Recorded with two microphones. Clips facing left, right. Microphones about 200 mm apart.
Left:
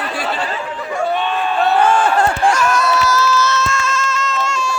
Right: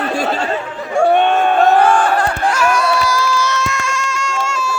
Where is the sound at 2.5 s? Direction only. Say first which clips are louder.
Right 1 dB; 10° right (ahead or behind).